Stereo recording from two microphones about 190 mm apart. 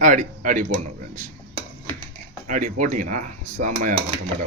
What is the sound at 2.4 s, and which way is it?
Speech, 45° right (ahead or behind).